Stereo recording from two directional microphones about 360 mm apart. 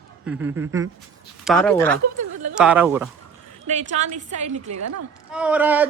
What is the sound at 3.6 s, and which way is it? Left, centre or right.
A woman's voice, centre.